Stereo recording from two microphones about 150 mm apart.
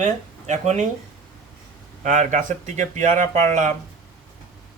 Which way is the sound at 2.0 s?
60° right (ahead or behind).